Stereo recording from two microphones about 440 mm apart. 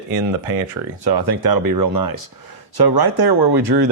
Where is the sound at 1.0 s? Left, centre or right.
Right.